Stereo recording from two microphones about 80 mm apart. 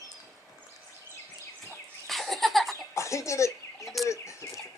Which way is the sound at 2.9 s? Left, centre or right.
Left.